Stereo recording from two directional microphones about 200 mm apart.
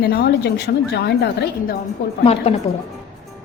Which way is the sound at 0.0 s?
50° left (ahead or behind).